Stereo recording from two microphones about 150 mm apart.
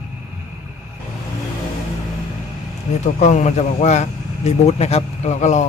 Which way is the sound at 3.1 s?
50° left (ahead or behind).